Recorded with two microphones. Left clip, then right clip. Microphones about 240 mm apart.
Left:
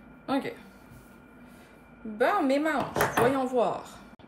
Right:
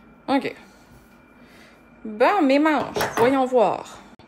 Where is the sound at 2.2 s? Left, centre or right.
Right.